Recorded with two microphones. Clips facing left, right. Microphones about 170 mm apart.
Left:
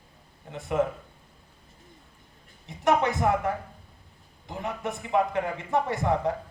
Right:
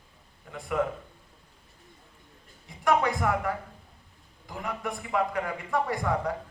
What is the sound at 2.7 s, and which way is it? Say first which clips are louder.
A man's voice: left 1 dB; 20° left (ahead or behind).